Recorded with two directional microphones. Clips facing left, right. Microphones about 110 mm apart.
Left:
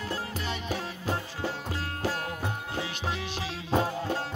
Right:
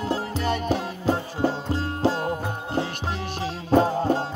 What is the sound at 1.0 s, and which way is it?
Music, 30° right (ahead or behind).